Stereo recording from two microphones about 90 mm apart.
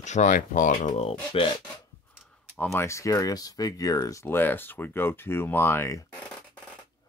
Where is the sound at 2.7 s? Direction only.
30° left (ahead or behind).